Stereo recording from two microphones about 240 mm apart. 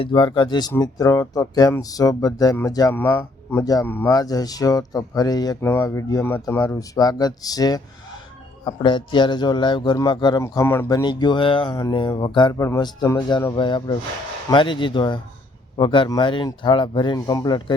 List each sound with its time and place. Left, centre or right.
0.0 s speech: centre